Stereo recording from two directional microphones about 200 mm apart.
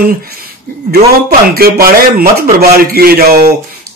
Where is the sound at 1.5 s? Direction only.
50° right (ahead or behind).